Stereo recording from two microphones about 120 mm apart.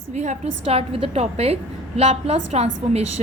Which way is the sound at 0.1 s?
75° right (ahead or behind).